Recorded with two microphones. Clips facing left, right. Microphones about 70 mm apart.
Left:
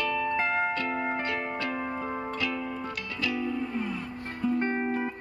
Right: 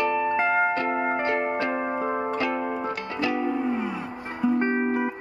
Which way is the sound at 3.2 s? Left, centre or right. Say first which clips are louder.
Right 5 dB; right.